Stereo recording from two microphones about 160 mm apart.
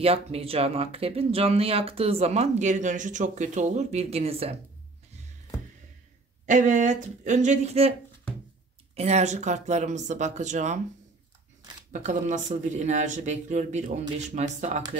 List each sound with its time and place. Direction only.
0.0 s speech: 40° right (ahead or behind)
6.4 s speech: 50° right (ahead or behind)
8.9 s speech: 45° right (ahead or behind)
11.9 s speech: 50° right (ahead or behind)